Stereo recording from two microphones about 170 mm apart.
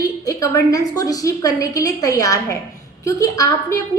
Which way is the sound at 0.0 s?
20° left (ahead or behind).